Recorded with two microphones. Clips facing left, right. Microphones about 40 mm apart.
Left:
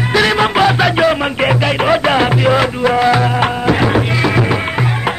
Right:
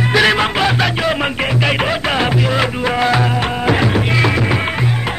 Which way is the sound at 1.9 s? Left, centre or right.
Centre.